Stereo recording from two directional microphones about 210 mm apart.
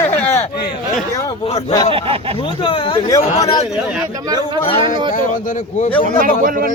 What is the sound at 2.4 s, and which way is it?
Speech, 25° left (ahead or behind).